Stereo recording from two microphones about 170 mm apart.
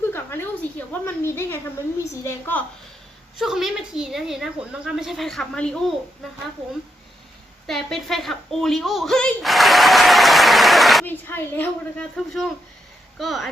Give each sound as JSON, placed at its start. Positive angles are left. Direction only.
{"t": 0.1, "sound": "a sound", "side_deg": 15}
{"t": 2.2, "sound": "speech", "side_deg": 10}
{"t": 3.3, "sound": "a woman's voice", "side_deg": 0}
{"t": 7.7, "sound": "a woman's voice", "side_deg": 0}
{"t": 11.0, "sound": "a woman's voice", "side_deg": 10}